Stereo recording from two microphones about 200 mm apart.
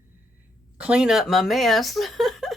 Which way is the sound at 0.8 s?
5° right (ahead or behind).